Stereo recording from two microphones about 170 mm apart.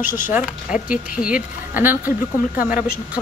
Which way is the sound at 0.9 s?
5° right (ahead or behind).